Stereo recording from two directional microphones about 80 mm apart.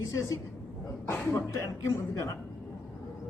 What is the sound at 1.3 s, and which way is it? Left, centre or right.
Speech, left.